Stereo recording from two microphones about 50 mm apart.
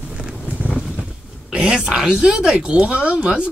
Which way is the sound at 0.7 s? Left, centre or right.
Centre.